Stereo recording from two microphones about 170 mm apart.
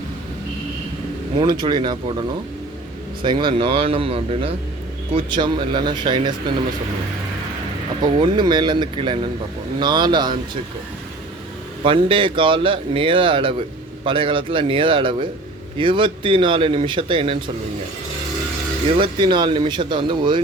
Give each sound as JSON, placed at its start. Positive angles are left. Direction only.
{"t": 1.4, "sound": "a man's voice", "side_deg": -30}
{"t": 8.1, "sound": "speech", "side_deg": -25}
{"t": 11.8, "sound": "a man's voice", "side_deg": -30}
{"t": 18.9, "sound": "speech", "side_deg": -30}